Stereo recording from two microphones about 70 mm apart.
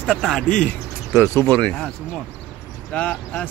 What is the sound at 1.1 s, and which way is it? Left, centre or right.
Speech, left.